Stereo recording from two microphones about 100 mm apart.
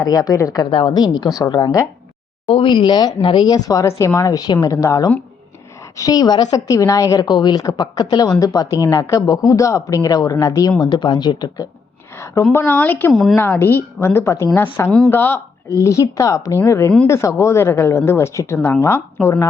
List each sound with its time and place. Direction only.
0.0 s a woman's voice: 40° left (ahead or behind)
0.7 s a woman's voice: 55° left (ahead or behind); by 1.8 s 40° left (ahead or behind)
2.5 s a woman's voice: 60° left (ahead or behind); by 7.2 s 35° left (ahead or behind)
7.2 s a woman's voice: 45° left (ahead or behind)
10.8 s a woman's voice: 45° left (ahead or behind); by 14.7 s 25° left (ahead or behind)
14.8 s speech: 10° left (ahead or behind)
15.1 s a woman's voice: 20° left (ahead or behind)
15.8 s a woman's voice: 30° left (ahead or behind)